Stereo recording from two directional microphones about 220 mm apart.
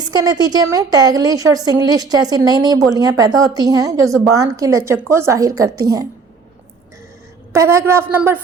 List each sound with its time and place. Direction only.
0.0 s a woman's voice: 20° right (ahead or behind)
7.5 s a woman's voice: 15° right (ahead or behind)